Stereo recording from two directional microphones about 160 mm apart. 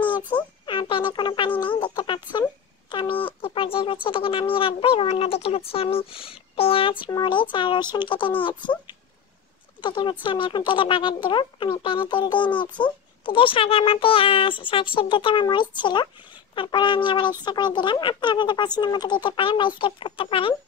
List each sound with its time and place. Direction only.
0.3 s speech: 30° left (ahead or behind)